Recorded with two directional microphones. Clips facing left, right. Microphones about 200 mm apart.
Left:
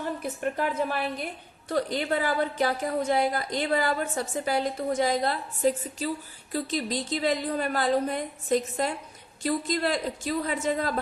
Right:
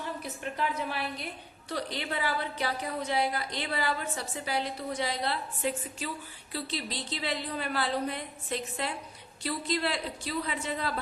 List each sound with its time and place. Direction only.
0.0 s a woman's voice: 50° left (ahead or behind)